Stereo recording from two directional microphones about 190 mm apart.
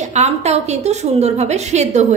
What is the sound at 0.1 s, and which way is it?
A woman's voice, 35° right (ahead or behind).